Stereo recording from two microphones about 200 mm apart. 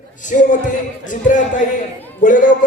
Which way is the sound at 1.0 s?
40° left (ahead or behind).